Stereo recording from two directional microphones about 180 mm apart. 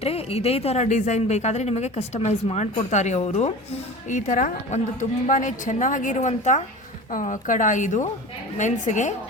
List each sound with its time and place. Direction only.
0.0 s a woman's voice: 35° left (ahead or behind)